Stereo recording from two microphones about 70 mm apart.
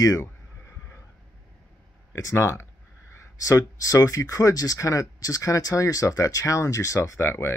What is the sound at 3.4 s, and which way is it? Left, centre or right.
Speech, left.